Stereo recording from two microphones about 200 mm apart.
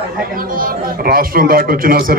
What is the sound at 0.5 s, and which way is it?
A man's voice, 45° right (ahead or behind).